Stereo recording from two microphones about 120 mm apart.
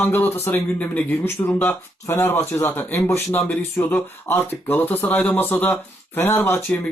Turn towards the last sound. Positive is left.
turn(degrees=20)  # may be behind; listen again after turning